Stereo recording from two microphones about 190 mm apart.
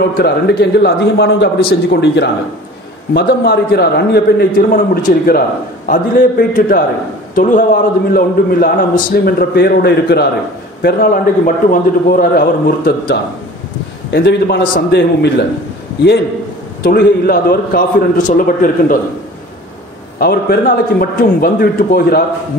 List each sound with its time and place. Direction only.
0.2 s a man's voice: 60° left (ahead or behind)
16.8 s a man's voice: 55° left (ahead or behind)
20.2 s a man's voice: 55° left (ahead or behind)